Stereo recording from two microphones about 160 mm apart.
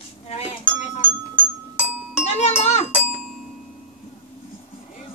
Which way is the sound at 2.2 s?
45° left (ahead or behind).